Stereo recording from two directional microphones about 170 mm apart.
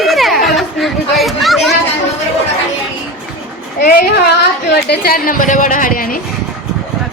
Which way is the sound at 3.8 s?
60° left (ahead or behind).